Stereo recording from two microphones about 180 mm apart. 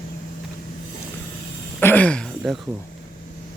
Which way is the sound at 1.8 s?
10° left (ahead or behind).